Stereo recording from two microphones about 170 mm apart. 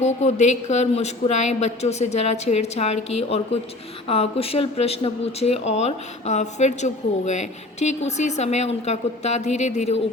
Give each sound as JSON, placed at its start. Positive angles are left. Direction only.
{"t": 0.0, "sound": "speech", "side_deg": 40}